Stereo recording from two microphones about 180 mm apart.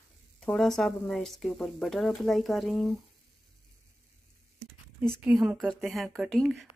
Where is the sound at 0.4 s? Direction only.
Centre (ahead or behind).